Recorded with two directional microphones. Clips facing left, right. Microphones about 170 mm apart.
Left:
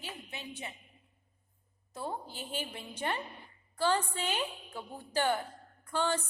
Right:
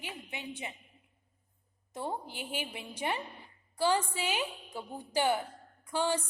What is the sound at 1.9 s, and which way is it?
A woman's voice, 15° right (ahead or behind).